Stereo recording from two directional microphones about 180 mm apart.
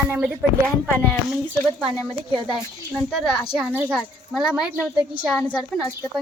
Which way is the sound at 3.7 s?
10° right (ahead or behind).